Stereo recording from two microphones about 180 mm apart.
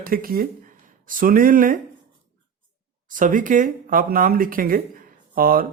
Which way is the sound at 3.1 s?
45° right (ahead or behind).